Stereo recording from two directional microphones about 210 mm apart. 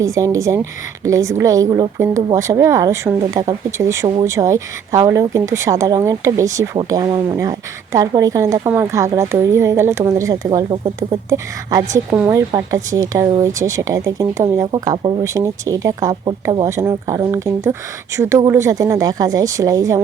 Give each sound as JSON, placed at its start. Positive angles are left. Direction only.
{"t": 0.0, "sound": "speech", "side_deg": -15}